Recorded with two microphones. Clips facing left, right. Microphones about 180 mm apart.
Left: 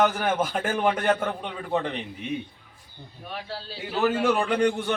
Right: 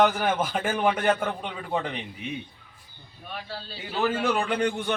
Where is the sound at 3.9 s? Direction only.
Centre (ahead or behind).